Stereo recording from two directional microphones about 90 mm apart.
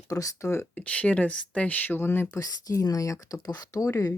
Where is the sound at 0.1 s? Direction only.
40° left (ahead or behind).